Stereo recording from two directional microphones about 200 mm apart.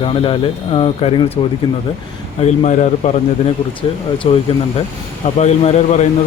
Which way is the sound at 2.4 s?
35° left (ahead or behind).